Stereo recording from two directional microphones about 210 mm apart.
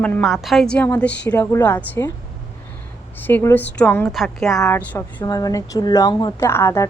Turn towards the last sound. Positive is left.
turn(degrees=10)  # may be behind; listen again after turning